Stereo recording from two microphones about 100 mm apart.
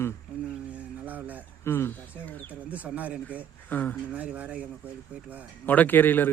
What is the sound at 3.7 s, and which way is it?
Speech, 15° left (ahead or behind).